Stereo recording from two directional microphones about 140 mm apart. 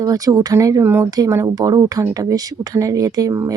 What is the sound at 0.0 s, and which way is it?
Speech, 25° right (ahead or behind).